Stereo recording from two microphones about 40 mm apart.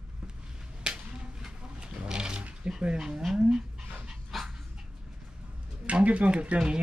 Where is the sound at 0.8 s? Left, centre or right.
Centre.